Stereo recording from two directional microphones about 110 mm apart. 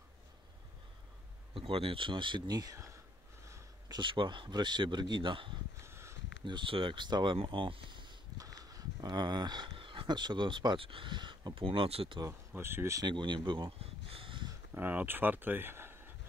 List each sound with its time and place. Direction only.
1.5 s speech: 55° right (ahead or behind); by 2.9 s 30° right (ahead or behind)
3.9 s speech: 50° right (ahead or behind)
5.8 s a sound: 25° right (ahead or behind)
6.4 s speech: 50° right (ahead or behind)
12.2 s speech: 25° right (ahead or behind)
13.0 s speech: 45° right (ahead or behind)
14.7 s speech: 15° right (ahead or behind)